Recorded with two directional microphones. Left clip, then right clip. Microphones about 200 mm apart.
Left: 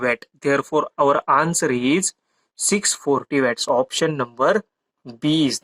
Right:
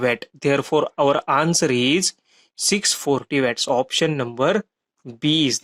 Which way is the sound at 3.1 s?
20° right (ahead or behind).